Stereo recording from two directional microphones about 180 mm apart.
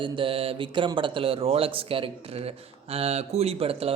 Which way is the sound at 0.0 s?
30° right (ahead or behind).